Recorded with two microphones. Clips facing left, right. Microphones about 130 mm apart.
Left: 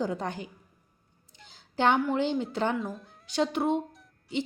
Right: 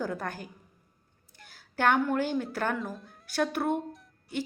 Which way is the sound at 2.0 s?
20° left (ahead or behind).